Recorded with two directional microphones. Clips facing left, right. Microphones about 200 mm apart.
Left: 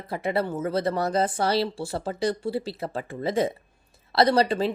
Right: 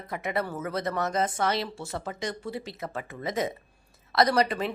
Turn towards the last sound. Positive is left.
turn(degrees=30)  # may be behind; listen again after turning